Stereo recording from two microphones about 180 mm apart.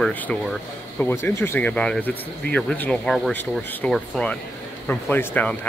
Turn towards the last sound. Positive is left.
turn(degrees=10)  # may be behind; listen again after turning